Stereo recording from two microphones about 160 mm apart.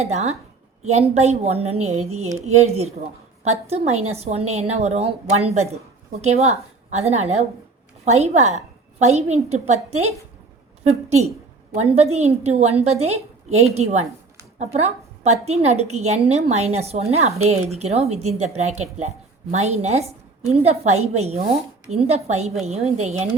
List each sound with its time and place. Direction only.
0.0 s a woman's voice: 45° right (ahead or behind)